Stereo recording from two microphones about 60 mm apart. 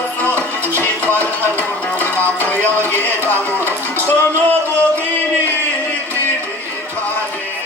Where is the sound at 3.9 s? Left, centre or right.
Left.